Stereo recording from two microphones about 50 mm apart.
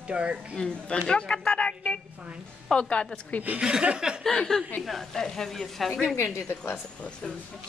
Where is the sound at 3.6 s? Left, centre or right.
Centre.